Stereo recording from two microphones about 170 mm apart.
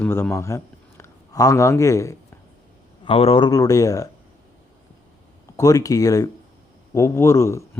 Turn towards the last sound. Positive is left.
turn(degrees=15)  # may be behind; listen again after turning